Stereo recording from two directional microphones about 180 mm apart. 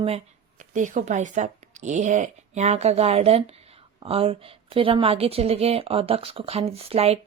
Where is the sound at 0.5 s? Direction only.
45° right (ahead or behind).